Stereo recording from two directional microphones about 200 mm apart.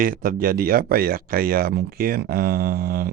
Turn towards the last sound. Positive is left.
turn(degrees=-45)  # may be behind; listen again after turning